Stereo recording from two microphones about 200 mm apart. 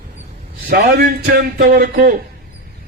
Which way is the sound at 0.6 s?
50° right (ahead or behind).